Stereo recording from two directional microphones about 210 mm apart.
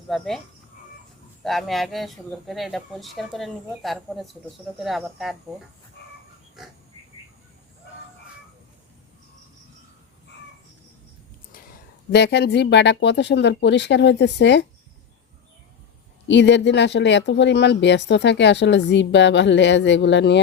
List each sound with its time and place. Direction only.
0.1 s speech: centre (ahead or behind)
1.5 s speech: centre (ahead or behind)
12.1 s speech: 55° left (ahead or behind)
16.2 s speech: 55° left (ahead or behind)